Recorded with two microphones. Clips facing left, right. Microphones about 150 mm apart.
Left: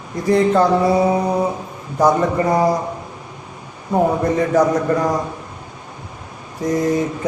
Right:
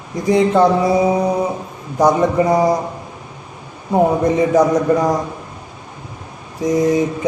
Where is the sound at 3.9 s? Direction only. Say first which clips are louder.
Right 2 dB; 10° right (ahead or behind).